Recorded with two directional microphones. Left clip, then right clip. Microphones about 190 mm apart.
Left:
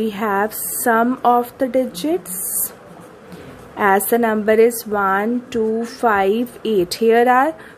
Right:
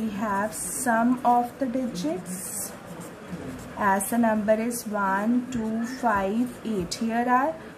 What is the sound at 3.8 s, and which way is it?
Speech, 50° left (ahead or behind).